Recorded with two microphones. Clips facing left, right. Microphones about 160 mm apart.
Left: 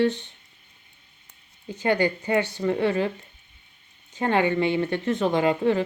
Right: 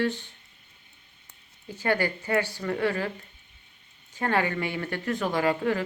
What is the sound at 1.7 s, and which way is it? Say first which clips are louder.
A woman's voice: left 4 dB; 20° left (ahead or behind).